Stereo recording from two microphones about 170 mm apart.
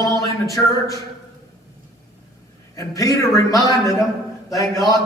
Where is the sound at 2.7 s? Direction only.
20° left (ahead or behind).